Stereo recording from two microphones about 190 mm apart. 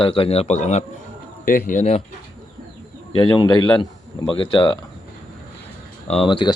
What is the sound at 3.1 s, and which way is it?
Speech, 25° left (ahead or behind).